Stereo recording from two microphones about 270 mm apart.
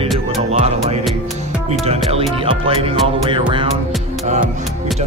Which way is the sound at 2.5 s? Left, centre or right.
Centre.